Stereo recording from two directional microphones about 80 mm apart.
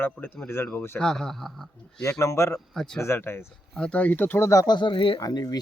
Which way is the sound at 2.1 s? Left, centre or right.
Left.